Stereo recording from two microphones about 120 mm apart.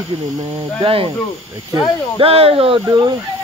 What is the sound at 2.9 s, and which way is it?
Speech, 35° right (ahead or behind).